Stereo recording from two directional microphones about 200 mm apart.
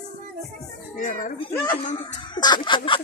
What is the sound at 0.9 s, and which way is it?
Speech, 40° left (ahead or behind).